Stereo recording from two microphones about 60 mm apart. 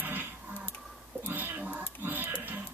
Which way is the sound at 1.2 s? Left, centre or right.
Right.